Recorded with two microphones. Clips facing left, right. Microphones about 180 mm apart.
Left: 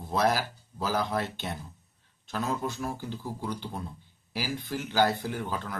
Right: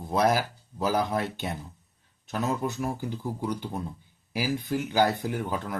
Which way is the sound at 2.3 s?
15° right (ahead or behind).